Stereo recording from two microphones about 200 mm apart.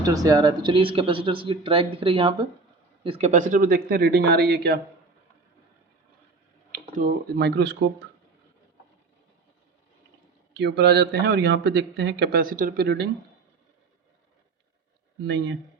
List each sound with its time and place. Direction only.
0.0 s speech: 15° right (ahead or behind); by 4.8 s 55° right (ahead or behind)
6.7 s speech: 40° right (ahead or behind)
10.5 s speech: 55° right (ahead or behind)